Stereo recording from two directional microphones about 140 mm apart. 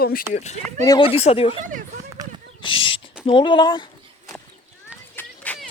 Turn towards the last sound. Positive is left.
turn(degrees=10)  # may be behind; listen again after turning